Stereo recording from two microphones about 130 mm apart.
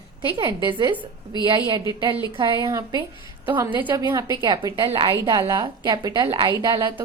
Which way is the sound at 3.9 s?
30° right (ahead or behind).